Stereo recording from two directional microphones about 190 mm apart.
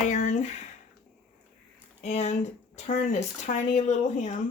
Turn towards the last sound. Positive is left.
turn(degrees=40)  # may be behind; listen again after turning